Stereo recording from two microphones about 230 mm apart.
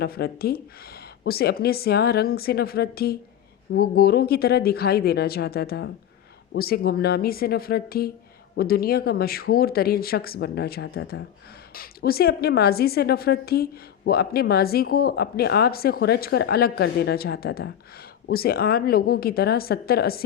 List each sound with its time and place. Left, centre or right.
0.0 s a woman's voice: left